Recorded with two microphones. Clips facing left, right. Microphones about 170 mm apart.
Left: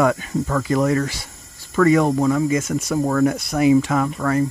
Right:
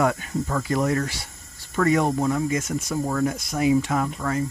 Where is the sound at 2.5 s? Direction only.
85° left.